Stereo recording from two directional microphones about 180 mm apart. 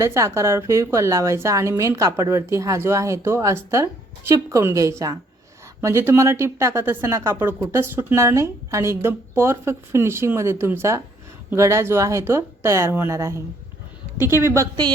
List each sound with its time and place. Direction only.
0.0 s speech: 15° right (ahead or behind)